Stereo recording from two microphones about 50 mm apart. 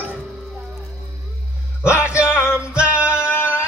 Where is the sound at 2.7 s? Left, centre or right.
Right.